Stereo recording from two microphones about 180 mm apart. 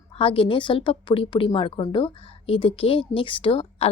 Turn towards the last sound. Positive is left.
turn(degrees=30)  # may be behind; listen again after turning